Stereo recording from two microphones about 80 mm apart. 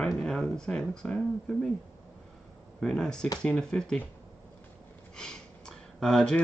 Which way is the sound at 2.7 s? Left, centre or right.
Centre.